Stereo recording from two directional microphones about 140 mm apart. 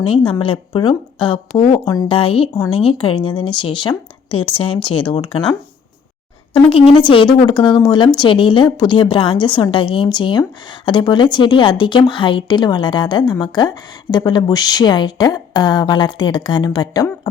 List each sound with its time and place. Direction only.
0.3 s speech: 40° left (ahead or behind)
2.0 s speech: 40° left (ahead or behind)
6.5 s speech: 40° left (ahead or behind)